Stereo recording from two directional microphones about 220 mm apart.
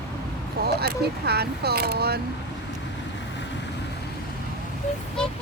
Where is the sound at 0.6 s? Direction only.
45° right (ahead or behind).